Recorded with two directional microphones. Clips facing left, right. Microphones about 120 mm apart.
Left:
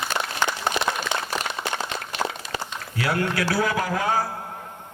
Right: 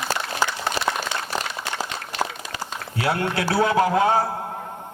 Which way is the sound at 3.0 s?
25° right (ahead or behind).